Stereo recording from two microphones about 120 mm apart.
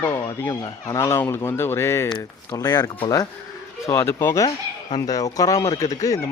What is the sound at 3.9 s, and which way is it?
Speech, 20° left (ahead or behind).